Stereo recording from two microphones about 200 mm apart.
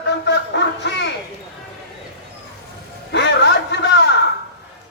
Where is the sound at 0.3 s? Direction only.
60° left (ahead or behind).